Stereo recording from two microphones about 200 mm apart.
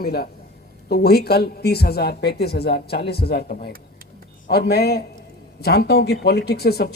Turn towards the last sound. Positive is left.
turn(degrees=50)  # may be behind; listen again after turning